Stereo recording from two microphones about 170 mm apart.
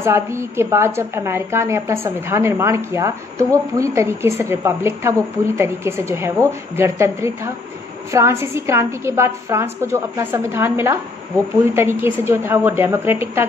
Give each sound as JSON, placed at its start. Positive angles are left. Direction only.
{"t": 0.0, "sound": "a woman's voice", "side_deg": -15}